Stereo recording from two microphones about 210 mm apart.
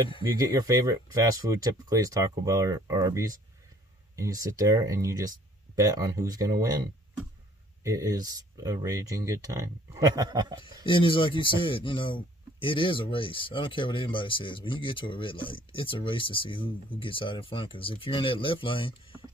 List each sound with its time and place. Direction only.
0.4 s speech: 15° right (ahead or behind)
10.9 s speech: 25° left (ahead or behind)